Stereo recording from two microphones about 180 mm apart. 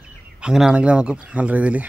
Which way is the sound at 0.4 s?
5° right (ahead or behind).